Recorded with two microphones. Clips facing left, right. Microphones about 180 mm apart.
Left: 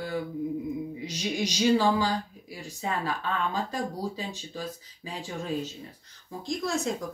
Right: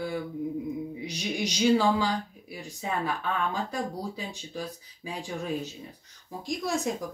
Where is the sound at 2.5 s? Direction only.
15° right (ahead or behind).